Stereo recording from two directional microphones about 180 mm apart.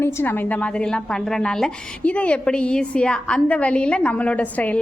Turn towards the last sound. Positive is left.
turn(degrees=10)  # may be behind; listen again after turning